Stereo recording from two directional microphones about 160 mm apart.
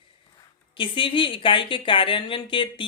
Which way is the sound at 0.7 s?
30° left (ahead or behind).